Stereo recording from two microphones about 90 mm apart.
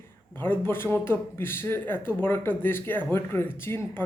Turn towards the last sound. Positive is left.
turn(degrees=25)  # may be behind; listen again after turning